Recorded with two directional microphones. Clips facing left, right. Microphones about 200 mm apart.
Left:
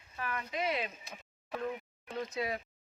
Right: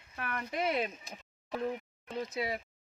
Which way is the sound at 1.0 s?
15° right (ahead or behind).